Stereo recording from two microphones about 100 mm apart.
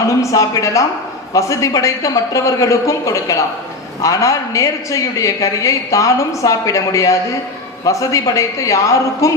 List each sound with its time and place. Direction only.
0.2 s a man's voice: 30° left (ahead or behind)